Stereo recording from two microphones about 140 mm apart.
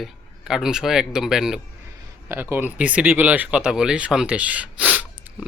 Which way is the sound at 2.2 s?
15° right (ahead or behind).